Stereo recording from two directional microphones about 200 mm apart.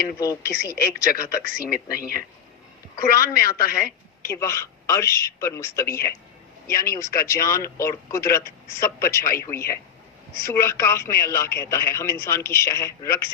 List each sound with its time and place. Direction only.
0.2 s speech: 15° left (ahead or behind)
0.8 s a man's voice: 50° left (ahead or behind)
4.2 s speech: 15° left (ahead or behind)